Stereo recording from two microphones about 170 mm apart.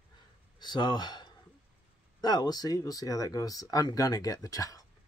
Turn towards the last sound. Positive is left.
turn(degrees=20)  # may be behind; listen again after turning